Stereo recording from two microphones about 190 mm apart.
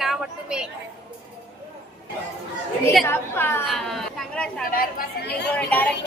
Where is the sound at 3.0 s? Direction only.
10° left (ahead or behind).